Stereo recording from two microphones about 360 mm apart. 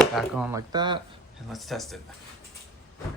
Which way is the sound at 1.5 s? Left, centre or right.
Centre.